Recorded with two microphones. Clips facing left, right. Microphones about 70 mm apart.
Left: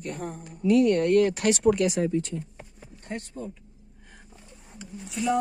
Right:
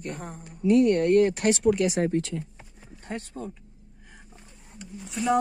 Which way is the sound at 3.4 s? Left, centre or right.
Right.